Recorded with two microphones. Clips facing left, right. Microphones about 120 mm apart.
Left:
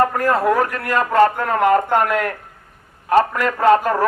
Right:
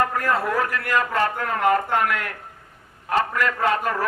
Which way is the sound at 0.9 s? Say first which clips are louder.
Left 8 dB; 35° left (ahead or behind).